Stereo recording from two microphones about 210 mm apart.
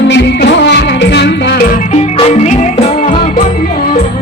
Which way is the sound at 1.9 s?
30° left (ahead or behind).